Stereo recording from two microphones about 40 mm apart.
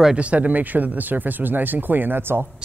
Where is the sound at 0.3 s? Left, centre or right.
Right.